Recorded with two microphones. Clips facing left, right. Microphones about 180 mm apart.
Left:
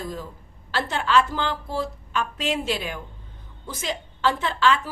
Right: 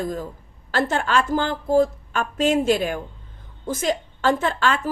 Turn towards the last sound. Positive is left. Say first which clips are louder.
# even
turn(degrees=-45)  # may be behind; listen again after turning